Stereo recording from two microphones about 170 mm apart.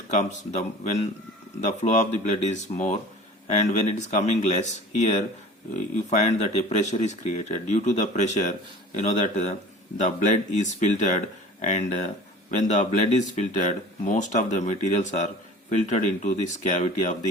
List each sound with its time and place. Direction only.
0.1 s speech: 45° left (ahead or behind)
1.6 s speech: 45° left (ahead or behind)